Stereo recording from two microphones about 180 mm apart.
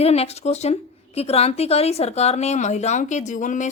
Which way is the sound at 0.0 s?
35° left (ahead or behind).